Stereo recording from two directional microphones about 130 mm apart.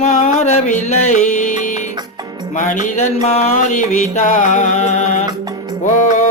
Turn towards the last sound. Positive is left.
turn(degrees=70)  # may be behind; listen again after turning